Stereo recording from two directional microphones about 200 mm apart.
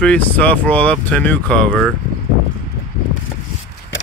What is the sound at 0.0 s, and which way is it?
Speech, 5° left (ahead or behind).